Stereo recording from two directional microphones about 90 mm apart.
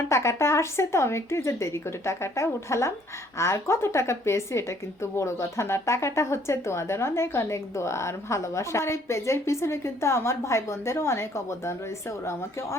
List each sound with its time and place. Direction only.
0.1 s speech: 30° left (ahead or behind)